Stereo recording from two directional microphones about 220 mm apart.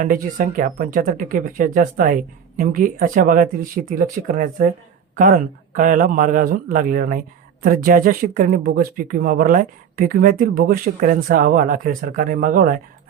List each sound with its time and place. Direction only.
0.0 s a man's voice: 35° right (ahead or behind)